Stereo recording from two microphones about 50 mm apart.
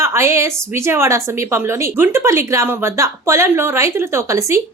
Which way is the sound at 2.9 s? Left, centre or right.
Right.